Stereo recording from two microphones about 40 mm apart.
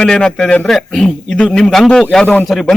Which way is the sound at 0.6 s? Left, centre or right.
Centre.